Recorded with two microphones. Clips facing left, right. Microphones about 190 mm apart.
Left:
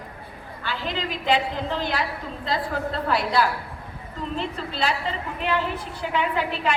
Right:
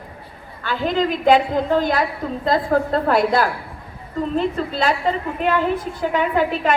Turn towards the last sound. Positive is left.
turn(degrees=-45)  # may be behind; listen again after turning